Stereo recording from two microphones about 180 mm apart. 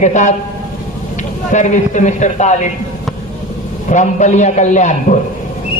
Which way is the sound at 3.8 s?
40° left (ahead or behind).